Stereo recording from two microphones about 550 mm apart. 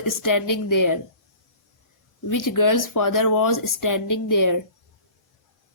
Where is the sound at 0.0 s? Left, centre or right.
Left.